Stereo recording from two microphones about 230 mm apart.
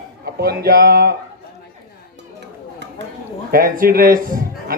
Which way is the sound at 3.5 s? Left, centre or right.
Right.